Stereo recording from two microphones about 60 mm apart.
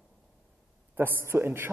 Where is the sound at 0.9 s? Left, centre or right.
Right.